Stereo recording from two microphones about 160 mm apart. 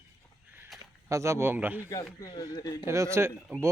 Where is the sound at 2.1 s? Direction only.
25° left (ahead or behind).